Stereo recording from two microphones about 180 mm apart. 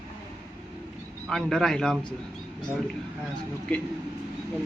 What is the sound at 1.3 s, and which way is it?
Speech, 5° left (ahead or behind).